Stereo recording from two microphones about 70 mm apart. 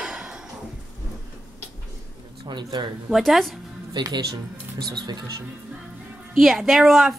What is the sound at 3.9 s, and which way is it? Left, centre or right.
Speech, right.